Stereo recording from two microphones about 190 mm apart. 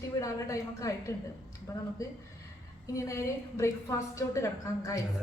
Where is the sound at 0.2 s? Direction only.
15° left (ahead or behind).